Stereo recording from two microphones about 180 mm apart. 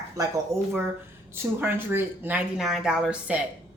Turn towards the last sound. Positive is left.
turn(degrees=-5)  # may be behind; listen again after turning